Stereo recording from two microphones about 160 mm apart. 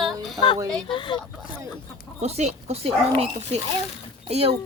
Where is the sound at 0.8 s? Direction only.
30° left (ahead or behind).